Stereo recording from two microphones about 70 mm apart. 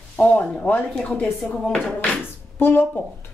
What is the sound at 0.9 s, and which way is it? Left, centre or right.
Speech, centre.